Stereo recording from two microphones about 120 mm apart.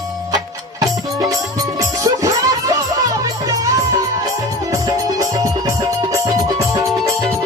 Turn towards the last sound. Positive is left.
turn(degrees=-30)  # may be behind; listen again after turning